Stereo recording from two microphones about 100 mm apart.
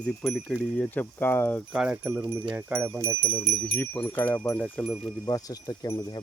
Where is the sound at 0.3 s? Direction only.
Centre (ahead or behind).